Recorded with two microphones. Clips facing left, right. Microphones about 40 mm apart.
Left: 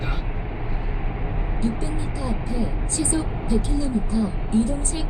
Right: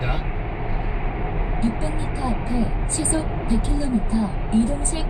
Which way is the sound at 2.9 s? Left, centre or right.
Centre.